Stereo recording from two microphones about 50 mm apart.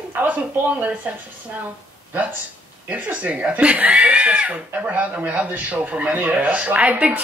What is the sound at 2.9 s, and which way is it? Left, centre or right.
Speech, right.